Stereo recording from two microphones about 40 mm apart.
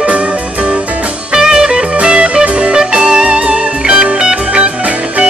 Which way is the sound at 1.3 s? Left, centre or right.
Centre.